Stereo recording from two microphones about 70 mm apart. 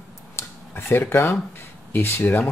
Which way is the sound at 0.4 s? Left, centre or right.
Left.